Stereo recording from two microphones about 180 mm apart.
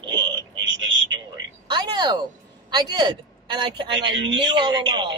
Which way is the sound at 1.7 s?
25° right (ahead or behind).